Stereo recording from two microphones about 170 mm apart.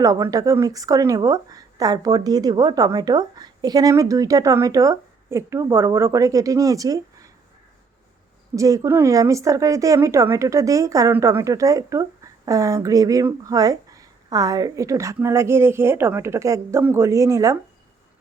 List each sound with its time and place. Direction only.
0.0 s speech: 20° right (ahead or behind)
8.5 s speech: 20° right (ahead or behind)